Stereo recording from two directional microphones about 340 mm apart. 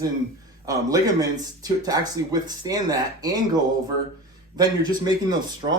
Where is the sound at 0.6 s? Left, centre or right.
Centre.